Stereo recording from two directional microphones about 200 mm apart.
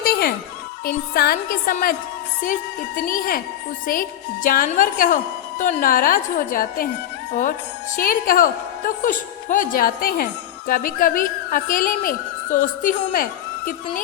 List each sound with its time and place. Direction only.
0.0 s music: 50° left (ahead or behind)
0.9 s a woman's voice: 50° left (ahead or behind)
4.4 s a woman's voice: 45° left (ahead or behind)
7.9 s a woman's voice: 45° left (ahead or behind)